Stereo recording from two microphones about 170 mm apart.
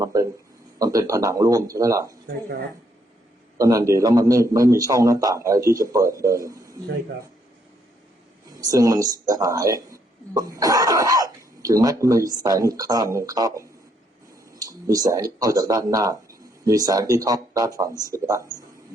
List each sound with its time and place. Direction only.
0.0 s a sound: 20° right (ahead or behind)
0.8 s speech: 20° right (ahead or behind)
3.6 s speech: 20° right (ahead or behind)
8.5 s speech: 20° right (ahead or behind)